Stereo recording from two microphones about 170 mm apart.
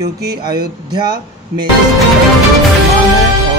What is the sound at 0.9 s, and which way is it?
Speech, 25° right (ahead or behind).